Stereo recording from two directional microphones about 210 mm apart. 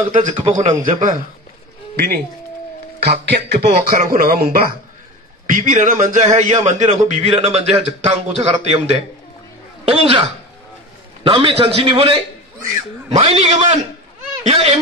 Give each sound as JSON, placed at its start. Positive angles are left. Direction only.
{"t": 0.5, "sound": "a man's voice", "side_deg": -30}
{"t": 2.0, "sound": "a man's voice", "side_deg": -45}
{"t": 3.3, "sound": "a man's voice", "side_deg": -50}
{"t": 11.2, "sound": "a man's voice", "side_deg": -25}